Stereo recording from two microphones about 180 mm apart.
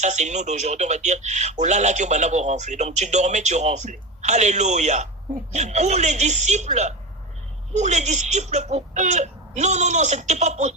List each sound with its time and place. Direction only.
0.0 s speech: 40° right (ahead or behind)